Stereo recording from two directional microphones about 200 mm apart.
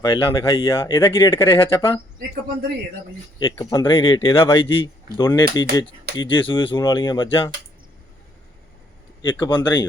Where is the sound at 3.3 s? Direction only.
20° left (ahead or behind).